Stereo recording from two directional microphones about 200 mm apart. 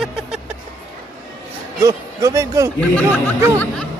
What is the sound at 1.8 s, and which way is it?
Speech, 15° right (ahead or behind).